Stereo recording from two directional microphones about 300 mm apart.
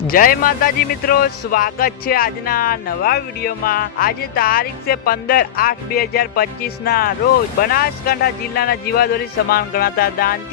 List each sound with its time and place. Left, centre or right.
0.1 s a man's voice: left